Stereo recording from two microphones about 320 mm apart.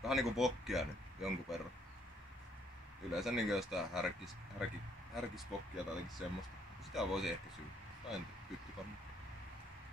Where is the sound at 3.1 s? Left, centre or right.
Centre.